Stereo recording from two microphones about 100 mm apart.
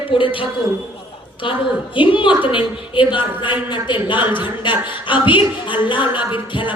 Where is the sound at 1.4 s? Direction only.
55° left (ahead or behind).